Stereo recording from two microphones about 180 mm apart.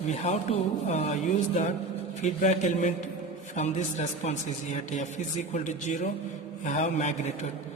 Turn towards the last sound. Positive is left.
turn(degrees=40)  # may be behind; listen again after turning